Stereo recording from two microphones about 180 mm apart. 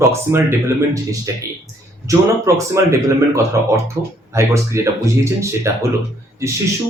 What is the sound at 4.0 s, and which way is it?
Speech, 15° right (ahead or behind).